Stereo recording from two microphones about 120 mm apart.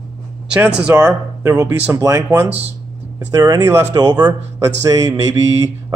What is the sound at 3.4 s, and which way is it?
Speech, 30° right (ahead or behind).